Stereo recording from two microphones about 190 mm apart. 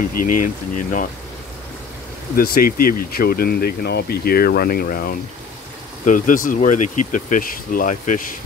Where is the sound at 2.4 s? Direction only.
50° left (ahead or behind).